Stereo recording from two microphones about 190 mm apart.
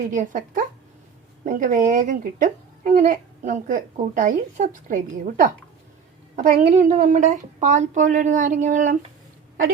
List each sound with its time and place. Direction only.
0.1 s a woman's voice: 40° right (ahead or behind)